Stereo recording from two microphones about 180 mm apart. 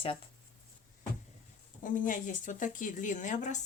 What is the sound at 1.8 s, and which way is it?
A woman's voice, 45° left (ahead or behind).